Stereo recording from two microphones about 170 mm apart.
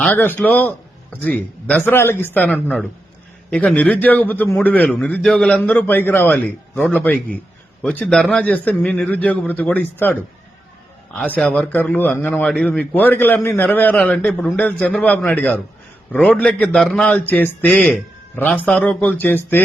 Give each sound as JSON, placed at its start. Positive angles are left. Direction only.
{"t": 0.0, "sound": "a man's voice", "side_deg": 10}